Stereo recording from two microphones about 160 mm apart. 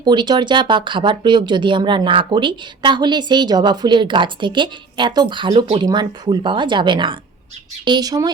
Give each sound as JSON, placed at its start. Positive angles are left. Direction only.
{"t": 0.0, "sound": "speech", "side_deg": -30}